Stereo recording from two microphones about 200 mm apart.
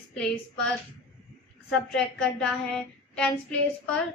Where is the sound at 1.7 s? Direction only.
5° left (ahead or behind).